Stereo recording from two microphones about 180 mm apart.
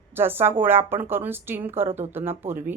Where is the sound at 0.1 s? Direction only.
10° right (ahead or behind).